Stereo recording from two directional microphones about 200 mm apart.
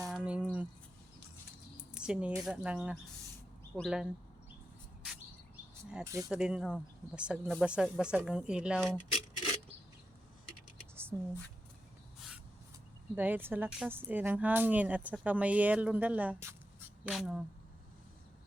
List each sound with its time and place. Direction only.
0.0 s a sound: 5° right (ahead or behind)
2.0 s a woman's voice: 5° right (ahead or behind)
6.1 s speech: 15° right (ahead or behind)
6.3 s speech: 5° right (ahead or behind)
9.1 s a sound: 20° right (ahead or behind)
13.1 s speech: 10° right (ahead or behind)